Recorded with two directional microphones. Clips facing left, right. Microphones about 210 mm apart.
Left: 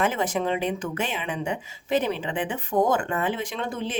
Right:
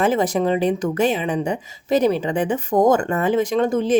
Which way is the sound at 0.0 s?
35° right (ahead or behind).